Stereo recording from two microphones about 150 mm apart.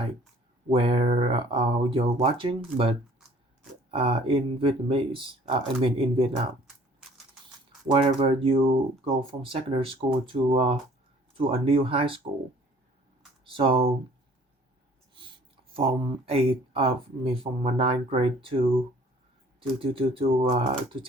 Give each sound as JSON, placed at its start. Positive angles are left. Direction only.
{"t": 0.7, "sound": "speech", "side_deg": -40}
{"t": 3.9, "sound": "speech", "side_deg": -35}
{"t": 7.9, "sound": "speech", "side_deg": -35}
{"t": 13.4, "sound": "speech", "side_deg": -35}
{"t": 15.7, "sound": "speech", "side_deg": -40}